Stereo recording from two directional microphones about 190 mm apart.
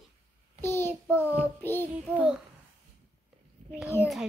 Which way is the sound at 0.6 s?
10° left (ahead or behind).